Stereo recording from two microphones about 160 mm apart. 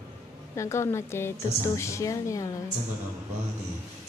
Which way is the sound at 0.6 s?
15° left (ahead or behind).